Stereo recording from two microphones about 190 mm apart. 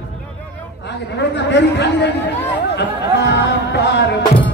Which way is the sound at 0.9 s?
65° left (ahead or behind).